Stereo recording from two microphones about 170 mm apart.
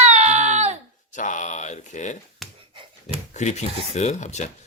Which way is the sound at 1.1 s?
45° left (ahead or behind).